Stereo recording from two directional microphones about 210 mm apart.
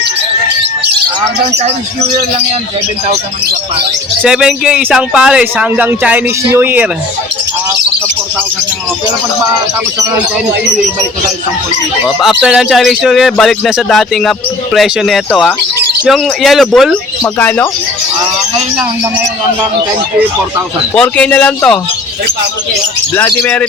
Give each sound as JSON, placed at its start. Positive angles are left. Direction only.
{"t": 1.5, "sound": "speech", "side_deg": -30}
{"t": 4.2, "sound": "speech", "side_deg": 0}
{"t": 12.4, "sound": "speech", "side_deg": -5}
{"t": 20.9, "sound": "speech", "side_deg": 5}
{"t": 23.1, "sound": "speech", "side_deg": 10}